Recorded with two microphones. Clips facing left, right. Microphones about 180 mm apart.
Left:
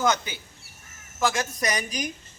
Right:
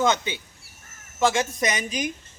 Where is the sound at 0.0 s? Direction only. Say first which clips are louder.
Right 2 dB; 25° right (ahead or behind).